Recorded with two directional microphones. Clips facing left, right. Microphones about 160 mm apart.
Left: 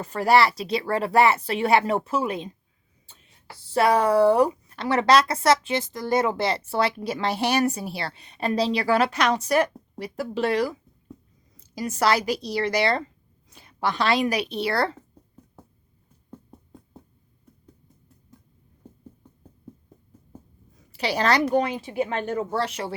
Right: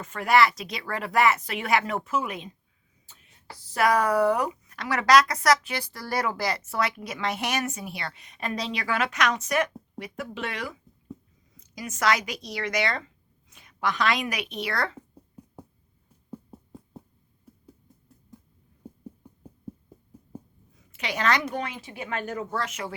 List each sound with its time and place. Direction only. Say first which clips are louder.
0.0 s speech: left 2 dB; 35° left (ahead or behind)
15.4 s a sound: right 4 dB; 10° right (ahead or behind)
16.3 s music: right 3 dB; 5° right (ahead or behind)
18.8 s heart sounds: right 4 dB; 10° right (ahead or behind)
19.2 s a sound: right 2 dB; 10° right (ahead or behind)
20.9 s speech: left 4 dB; 35° left (ahead or behind)